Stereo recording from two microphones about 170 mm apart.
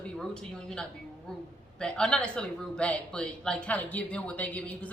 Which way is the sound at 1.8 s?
5° left (ahead or behind).